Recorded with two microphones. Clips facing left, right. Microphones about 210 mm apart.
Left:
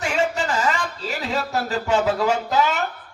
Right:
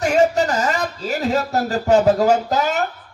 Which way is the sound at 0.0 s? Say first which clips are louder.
Right 7 dB; 45° right (ahead or behind).